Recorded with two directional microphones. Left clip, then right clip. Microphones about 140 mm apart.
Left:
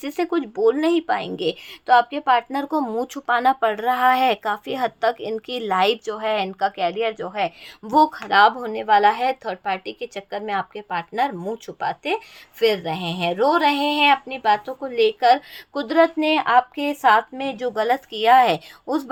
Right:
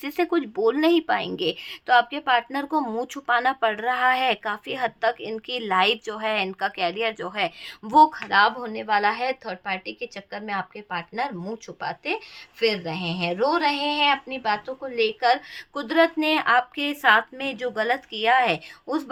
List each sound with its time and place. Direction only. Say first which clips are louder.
0.0 s speech: left 1 dB; 10° left (ahead or behind)
8.3 s speech: left 4 dB; 45° left (ahead or behind); by 16.1 s 25° left (ahead or behind)
16.1 s a woman's voice: left 3 dB; 15° left (ahead or behind)